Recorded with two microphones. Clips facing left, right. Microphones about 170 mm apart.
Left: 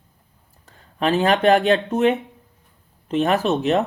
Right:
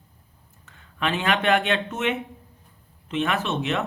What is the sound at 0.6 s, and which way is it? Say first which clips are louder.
Speech: left 6 dB; 35° left (ahead or behind).